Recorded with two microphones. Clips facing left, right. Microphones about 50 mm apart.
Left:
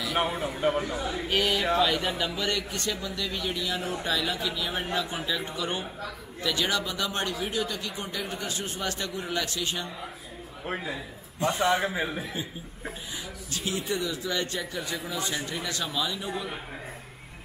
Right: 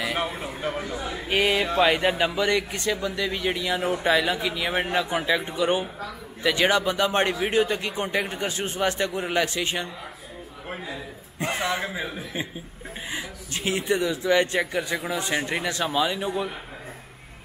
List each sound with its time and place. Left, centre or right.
0.3 s speech: centre
0.6 s a man's voice: centre
1.1 s a sound: centre
1.8 s a man's voice: right
11.3 s a man's voice: right
11.8 s a man's voice: centre
13.6 s a man's voice: right